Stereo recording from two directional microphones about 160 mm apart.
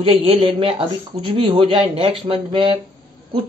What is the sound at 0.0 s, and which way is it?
Speech, 35° right (ahead or behind).